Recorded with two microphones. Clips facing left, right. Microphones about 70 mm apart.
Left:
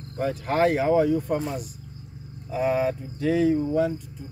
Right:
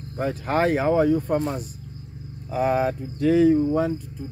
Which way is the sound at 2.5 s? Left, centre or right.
Right.